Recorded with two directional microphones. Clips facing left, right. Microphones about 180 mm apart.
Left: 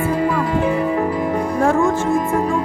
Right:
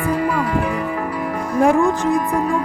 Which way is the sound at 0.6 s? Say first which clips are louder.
Left 5 dB; 30° left (ahead or behind).